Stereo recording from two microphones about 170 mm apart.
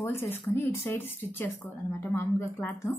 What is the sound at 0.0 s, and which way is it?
A woman's voice, 15° left (ahead or behind).